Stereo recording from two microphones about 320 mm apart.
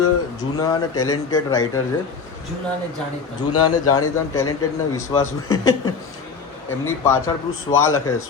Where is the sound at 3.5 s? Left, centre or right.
Left.